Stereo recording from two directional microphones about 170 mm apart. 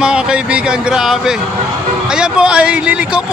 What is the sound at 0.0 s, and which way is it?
Speech, 5° right (ahead or behind).